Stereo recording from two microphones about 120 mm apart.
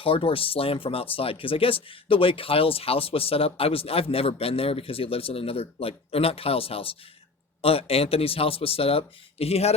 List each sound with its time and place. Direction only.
0.0 s speech: 50° left (ahead or behind)